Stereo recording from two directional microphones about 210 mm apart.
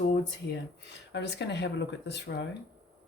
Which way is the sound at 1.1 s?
55° left (ahead or behind).